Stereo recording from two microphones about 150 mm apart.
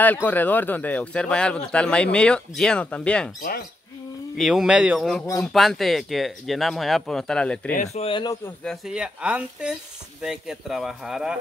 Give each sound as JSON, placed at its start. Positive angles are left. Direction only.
{"t": 0.0, "sound": "a man's voice", "side_deg": 10}
{"t": 4.4, "sound": "speech", "side_deg": 0}
{"t": 7.7, "sound": "speech", "side_deg": 50}
{"t": 8.6, "sound": "speech", "side_deg": -5}